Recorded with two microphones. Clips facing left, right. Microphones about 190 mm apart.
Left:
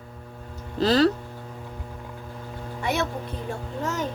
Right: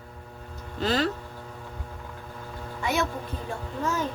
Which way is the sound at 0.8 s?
35° left (ahead or behind).